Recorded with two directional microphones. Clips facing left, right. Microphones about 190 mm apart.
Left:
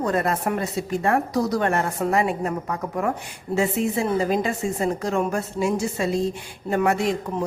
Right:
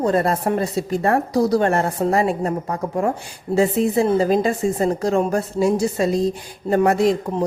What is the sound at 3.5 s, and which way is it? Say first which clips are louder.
A woman's voice: right 5 dB; 35° right (ahead or behind).